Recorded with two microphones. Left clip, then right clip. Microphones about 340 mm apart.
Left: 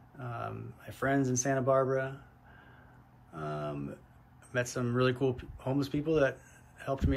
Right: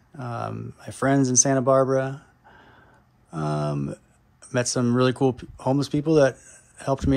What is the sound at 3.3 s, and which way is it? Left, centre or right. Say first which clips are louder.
Speech: right 10 dB; centre.